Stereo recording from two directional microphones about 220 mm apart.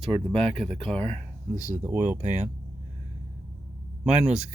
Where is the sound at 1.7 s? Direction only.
10° right (ahead or behind).